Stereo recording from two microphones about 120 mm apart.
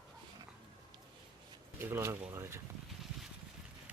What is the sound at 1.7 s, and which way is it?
Speech, 20° right (ahead or behind).